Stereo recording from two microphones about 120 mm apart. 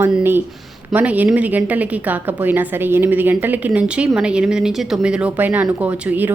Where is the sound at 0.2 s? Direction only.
15° right (ahead or behind).